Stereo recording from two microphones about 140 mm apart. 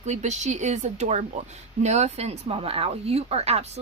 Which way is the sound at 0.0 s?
55° right (ahead or behind).